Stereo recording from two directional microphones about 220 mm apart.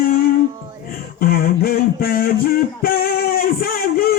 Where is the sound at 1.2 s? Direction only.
40° left (ahead or behind).